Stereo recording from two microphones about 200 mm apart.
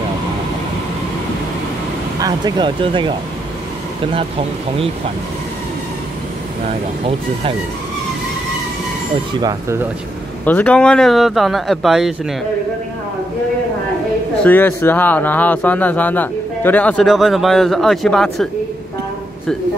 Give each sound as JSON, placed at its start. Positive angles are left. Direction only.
{"t": 2.1, "sound": "speech", "side_deg": -20}
{"t": 9.4, "sound": "speech", "side_deg": -15}
{"t": 10.4, "sound": "speech", "side_deg": 10}
{"t": 14.4, "sound": "speech", "side_deg": 10}